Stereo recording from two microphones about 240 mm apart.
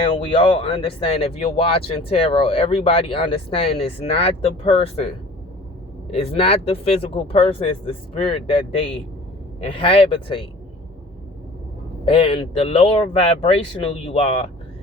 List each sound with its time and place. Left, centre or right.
0.3 s speech: left
6.1 s speech: left
12.0 s speech: left